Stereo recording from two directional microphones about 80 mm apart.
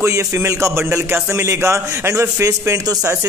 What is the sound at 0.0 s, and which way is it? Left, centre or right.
A man's voice, right.